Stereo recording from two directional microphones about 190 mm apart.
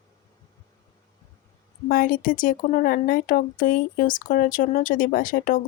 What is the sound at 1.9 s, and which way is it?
Speech, 50° left (ahead or behind).